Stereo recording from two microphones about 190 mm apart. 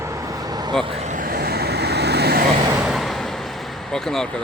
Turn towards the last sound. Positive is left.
turn(degrees=5)  # may be behind; listen again after turning